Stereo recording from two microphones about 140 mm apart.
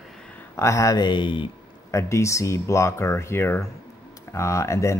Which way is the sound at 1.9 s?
20° left (ahead or behind).